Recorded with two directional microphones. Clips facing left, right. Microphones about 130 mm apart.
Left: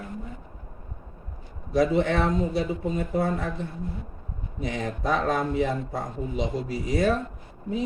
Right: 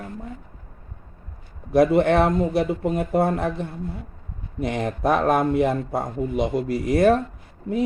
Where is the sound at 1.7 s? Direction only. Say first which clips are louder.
Right 5 dB; 60° right (ahead or behind).